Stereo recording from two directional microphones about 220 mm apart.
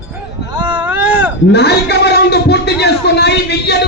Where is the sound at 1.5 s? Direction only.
50° left (ahead or behind).